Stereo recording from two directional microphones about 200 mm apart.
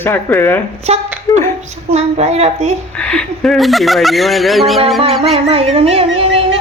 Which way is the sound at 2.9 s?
5° left (ahead or behind).